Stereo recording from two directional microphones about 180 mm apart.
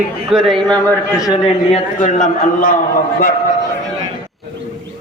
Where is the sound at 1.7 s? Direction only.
40° left (ahead or behind).